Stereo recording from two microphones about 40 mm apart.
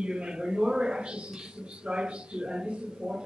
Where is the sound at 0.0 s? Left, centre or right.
Right.